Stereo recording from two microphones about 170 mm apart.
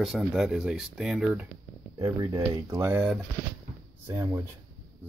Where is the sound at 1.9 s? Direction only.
20° right (ahead or behind).